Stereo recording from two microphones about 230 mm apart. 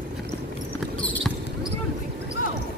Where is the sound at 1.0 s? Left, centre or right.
Centre.